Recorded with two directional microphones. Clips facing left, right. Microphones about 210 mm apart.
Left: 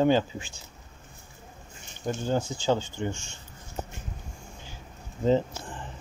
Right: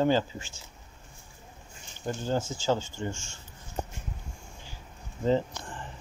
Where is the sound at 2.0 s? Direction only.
15° left (ahead or behind).